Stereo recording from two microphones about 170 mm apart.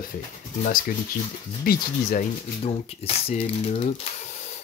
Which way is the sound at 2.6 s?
35° left (ahead or behind).